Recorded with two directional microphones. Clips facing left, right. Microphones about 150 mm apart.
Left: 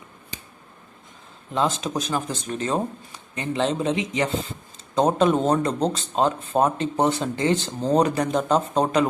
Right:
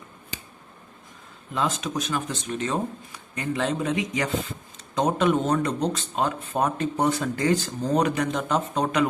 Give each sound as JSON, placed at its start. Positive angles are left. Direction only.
{"t": 1.5, "sound": "speech", "side_deg": 30}